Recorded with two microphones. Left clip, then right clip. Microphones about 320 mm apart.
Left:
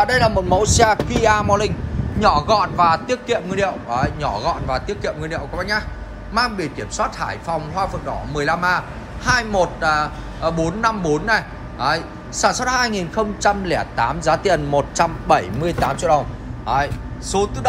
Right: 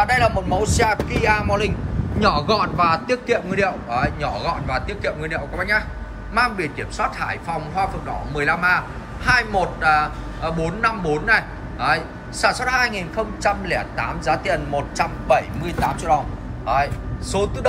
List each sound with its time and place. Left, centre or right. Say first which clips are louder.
0.1 s a man's voice: left 2 dB; centre
13.5 s speech: left 1 dB; left
15.0 s speech: even; centre